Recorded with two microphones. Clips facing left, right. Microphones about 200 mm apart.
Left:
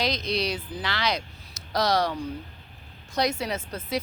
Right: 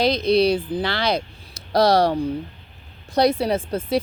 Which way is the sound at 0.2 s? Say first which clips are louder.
Right 11 dB; 30° right (ahead or behind).